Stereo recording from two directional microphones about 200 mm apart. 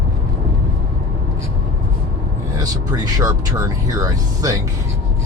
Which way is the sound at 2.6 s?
20° right (ahead or behind).